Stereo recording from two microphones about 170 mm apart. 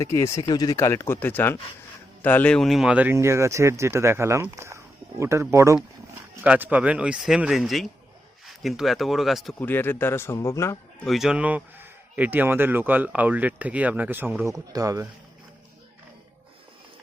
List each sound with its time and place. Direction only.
0.0 s speech: 20° left (ahead or behind)
11.0 s speech: centre (ahead or behind); by 15.0 s 20° right (ahead or behind)